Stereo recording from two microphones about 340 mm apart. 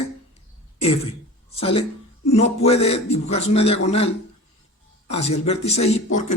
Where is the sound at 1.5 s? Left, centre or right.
Centre.